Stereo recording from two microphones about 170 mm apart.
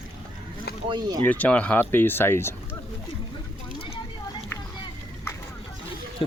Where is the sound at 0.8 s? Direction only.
30° right (ahead or behind).